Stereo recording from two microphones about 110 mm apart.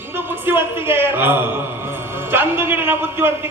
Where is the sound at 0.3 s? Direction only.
20° right (ahead or behind).